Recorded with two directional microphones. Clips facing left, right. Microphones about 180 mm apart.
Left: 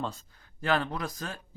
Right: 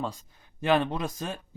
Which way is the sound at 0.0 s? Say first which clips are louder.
Right 2 dB; 15° right (ahead or behind).